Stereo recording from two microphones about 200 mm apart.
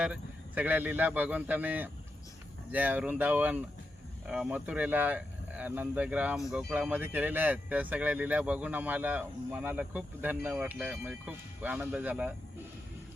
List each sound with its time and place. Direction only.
0.0 s speech: 5° right (ahead or behind)